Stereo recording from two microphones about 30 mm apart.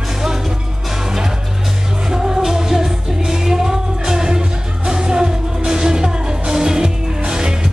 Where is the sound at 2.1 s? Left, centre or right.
Centre.